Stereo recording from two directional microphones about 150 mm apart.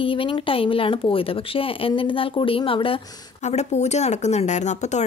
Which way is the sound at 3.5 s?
50° left (ahead or behind).